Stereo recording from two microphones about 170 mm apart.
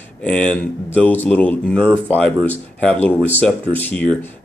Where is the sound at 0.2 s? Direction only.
5° left (ahead or behind).